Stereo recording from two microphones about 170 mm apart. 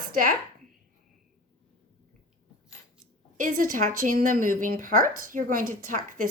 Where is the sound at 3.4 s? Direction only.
50° right (ahead or behind).